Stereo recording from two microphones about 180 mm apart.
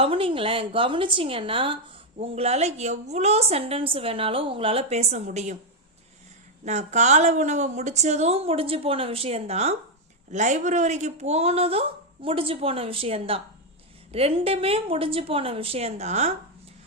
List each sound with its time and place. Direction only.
0.0 s a woman's voice: 30° right (ahead or behind)
6.7 s a woman's voice: 40° right (ahead or behind)